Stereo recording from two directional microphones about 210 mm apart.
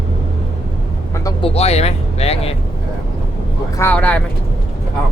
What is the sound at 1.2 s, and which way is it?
Speech, 25° left (ahead or behind).